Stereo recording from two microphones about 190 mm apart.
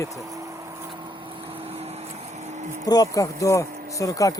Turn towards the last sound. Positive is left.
turn(degrees=20)  # may be behind; listen again after turning